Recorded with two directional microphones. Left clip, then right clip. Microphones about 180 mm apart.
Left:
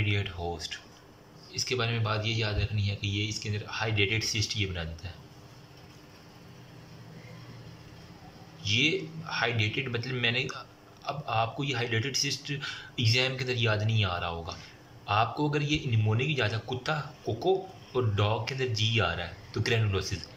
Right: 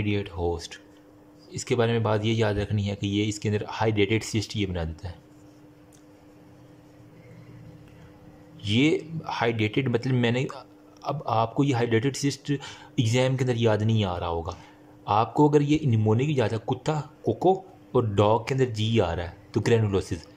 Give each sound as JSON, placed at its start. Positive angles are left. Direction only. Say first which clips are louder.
{"t": 0.0, "sound": "speech", "louder": "right 4 dB", "side_deg": -30}
{"t": 8.6, "sound": "speech", "louder": "right 3 dB", "side_deg": -40}